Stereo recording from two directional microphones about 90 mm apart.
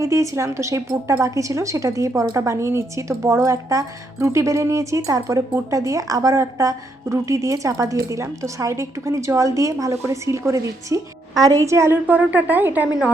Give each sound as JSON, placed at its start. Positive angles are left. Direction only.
{"t": 0.0, "sound": "speech", "side_deg": -35}
{"t": 12.0, "sound": "speech", "side_deg": -15}